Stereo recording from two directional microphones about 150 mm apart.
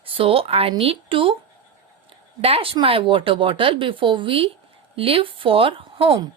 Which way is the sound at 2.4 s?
40° right (ahead or behind).